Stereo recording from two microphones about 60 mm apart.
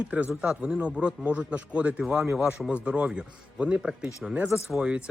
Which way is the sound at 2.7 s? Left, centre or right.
Right.